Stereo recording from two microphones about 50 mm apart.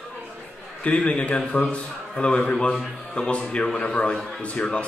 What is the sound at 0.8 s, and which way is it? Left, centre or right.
A man's voice, left.